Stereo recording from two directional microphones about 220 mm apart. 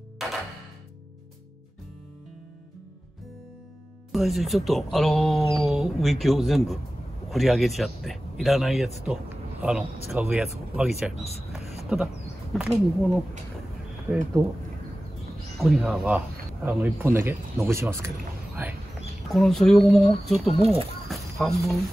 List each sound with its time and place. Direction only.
0.2 s music: centre (ahead or behind)
4.1 s speech: centre (ahead or behind)
11.9 s speech: 5° right (ahead or behind)
15.6 s speech: centre (ahead or behind)
18.6 s a sound: 10° right (ahead or behind)
19.3 s speech: centre (ahead or behind)
20.4 s speech: 25° right (ahead or behind)
21.1 s a sound: centre (ahead or behind)